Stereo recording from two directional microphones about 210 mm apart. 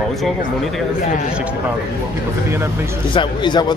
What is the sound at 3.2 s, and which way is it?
Speech, 20° left (ahead or behind).